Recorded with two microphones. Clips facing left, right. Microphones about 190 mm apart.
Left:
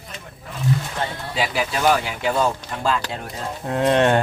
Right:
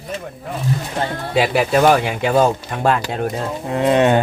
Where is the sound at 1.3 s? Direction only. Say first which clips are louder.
Right 9 dB; 60° right (ahead or behind).